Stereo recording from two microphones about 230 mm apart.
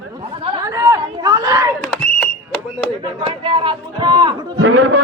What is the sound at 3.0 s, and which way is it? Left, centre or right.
A man's voice, right.